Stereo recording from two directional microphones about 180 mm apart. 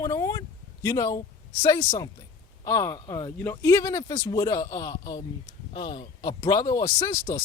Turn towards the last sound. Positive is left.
turn(degrees=25)  # may be behind; listen again after turning